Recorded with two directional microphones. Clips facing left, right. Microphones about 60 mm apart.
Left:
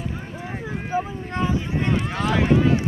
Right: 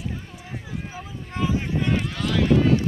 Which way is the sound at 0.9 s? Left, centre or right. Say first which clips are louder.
Left 12 dB; left.